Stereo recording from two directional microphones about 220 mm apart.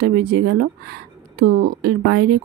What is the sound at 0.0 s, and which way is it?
Speech, 45° right (ahead or behind).